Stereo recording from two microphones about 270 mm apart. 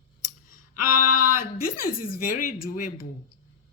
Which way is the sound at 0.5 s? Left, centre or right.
Left.